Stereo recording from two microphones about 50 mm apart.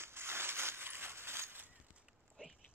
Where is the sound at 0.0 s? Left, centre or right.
Right.